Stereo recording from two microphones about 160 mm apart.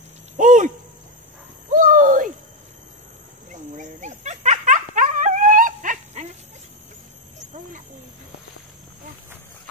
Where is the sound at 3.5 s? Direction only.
50° right (ahead or behind).